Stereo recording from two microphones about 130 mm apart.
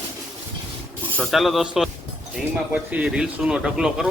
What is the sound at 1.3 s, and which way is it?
Speech, centre (ahead or behind).